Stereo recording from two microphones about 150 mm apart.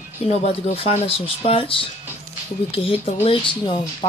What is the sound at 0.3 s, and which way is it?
Speech, 45° left (ahead or behind).